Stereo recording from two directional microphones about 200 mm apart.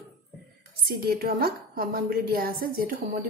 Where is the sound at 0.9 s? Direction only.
50° right (ahead or behind).